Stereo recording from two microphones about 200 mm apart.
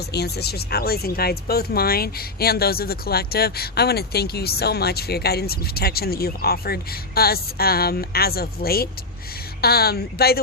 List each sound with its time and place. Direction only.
0.1 s speech: 55° left (ahead or behind)